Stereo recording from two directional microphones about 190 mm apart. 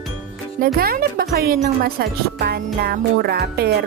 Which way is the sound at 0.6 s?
50° right (ahead or behind).